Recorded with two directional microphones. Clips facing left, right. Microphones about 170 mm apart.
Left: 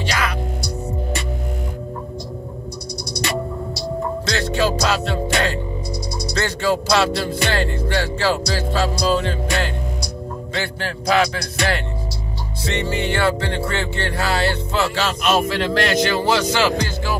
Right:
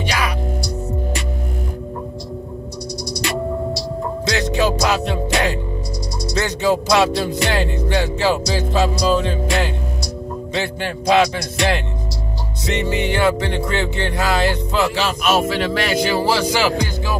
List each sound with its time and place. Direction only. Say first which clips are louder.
0.0 s music: right 1 dB; 15° right (ahead or behind)
4.3 s music: right 2 dB; 15° right (ahead or behind)
6.3 s speech: right 2 dB; 15° right (ahead or behind)
10.5 s music: right 3 dB; 20° right (ahead or behind)
12.6 s speech: right 2 dB; 15° right (ahead or behind)
15.2 s speech: right 1 dB; 5° right (ahead or behind)